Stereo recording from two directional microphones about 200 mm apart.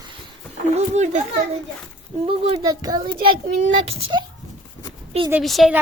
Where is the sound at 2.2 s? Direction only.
25° right (ahead or behind).